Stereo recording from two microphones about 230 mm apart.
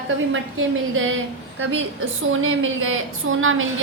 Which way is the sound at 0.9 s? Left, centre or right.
Right.